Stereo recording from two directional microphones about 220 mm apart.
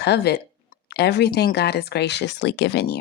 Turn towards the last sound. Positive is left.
turn(degrees=50)  # may be behind; listen again after turning